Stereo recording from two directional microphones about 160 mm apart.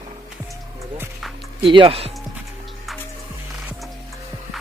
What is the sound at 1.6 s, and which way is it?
Speech, 35° right (ahead or behind).